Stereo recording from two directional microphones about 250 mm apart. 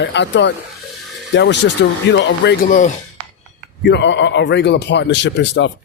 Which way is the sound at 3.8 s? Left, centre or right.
Left.